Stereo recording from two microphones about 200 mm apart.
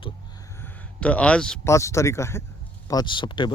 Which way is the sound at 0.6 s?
5° left (ahead or behind).